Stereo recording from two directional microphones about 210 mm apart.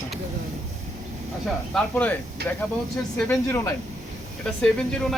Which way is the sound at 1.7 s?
Centre (ahead or behind).